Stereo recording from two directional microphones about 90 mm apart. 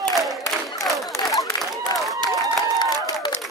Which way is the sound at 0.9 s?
Centre (ahead or behind).